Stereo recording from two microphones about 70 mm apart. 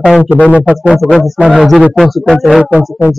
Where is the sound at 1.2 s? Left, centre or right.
Centre.